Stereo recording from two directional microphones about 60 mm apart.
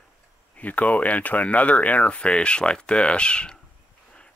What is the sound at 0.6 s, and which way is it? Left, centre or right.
Speech, left.